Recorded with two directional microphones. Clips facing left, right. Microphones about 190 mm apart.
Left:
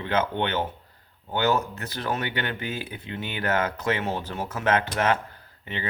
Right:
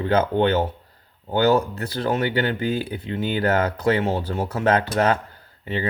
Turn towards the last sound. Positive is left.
turn(degrees=-35)  # may be behind; listen again after turning